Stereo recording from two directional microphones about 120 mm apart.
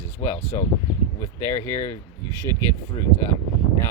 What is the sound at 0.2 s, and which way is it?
Speech, 20° left (ahead or behind).